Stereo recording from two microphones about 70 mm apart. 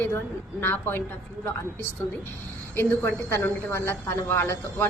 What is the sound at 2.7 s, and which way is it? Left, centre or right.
A woman's voice, left.